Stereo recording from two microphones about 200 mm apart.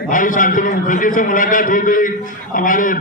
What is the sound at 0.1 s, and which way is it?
A man's voice, 40° left (ahead or behind).